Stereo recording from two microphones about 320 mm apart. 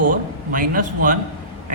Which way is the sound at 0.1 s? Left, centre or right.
Right.